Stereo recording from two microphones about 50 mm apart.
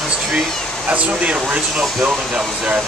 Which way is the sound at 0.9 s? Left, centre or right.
Right.